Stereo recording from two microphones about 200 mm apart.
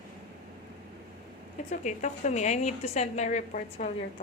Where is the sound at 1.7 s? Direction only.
35° left (ahead or behind).